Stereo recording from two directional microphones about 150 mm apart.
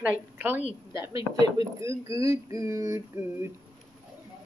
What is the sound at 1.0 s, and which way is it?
Speech, 25° right (ahead or behind).